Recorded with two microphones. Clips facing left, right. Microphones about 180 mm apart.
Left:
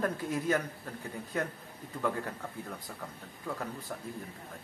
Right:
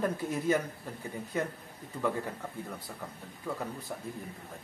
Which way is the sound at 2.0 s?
5° right (ahead or behind).